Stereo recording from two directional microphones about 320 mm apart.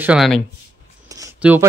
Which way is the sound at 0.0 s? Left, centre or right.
Centre.